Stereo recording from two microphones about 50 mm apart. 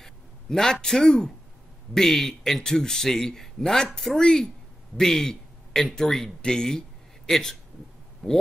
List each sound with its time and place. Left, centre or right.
0.0 s a man's voice: centre